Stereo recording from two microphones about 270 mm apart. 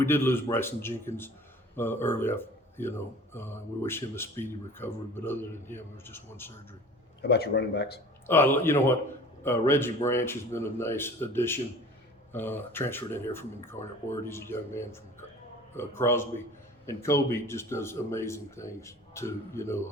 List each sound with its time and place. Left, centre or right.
0.0 s speech: centre
7.2 s speech: left
8.3 s speech: centre